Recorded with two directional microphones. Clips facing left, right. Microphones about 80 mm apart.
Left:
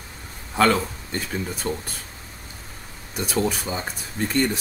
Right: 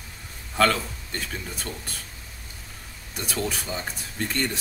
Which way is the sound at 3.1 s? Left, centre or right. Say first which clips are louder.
Left 5 dB; centre.